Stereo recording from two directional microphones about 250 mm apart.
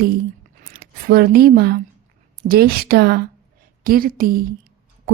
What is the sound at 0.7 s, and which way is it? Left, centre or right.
Speech, right.